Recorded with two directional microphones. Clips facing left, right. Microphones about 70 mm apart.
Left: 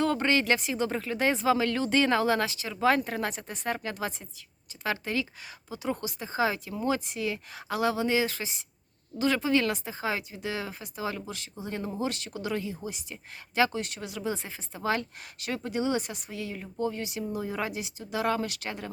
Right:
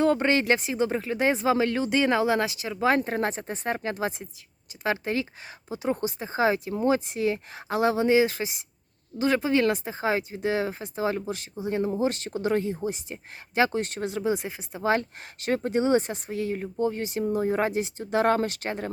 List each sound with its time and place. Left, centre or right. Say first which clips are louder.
0.0 s speech: right 4 dB; right
15.4 s speech: right 6 dB; right